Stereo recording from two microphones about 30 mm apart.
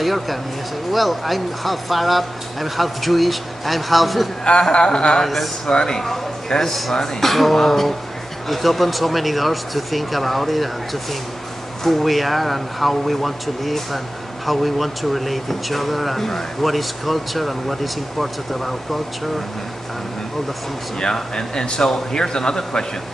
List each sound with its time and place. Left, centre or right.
0.0 s speech: centre
4.7 s speech: left
5.2 s speech: centre
5.9 s speech: centre
21.0 s speech: left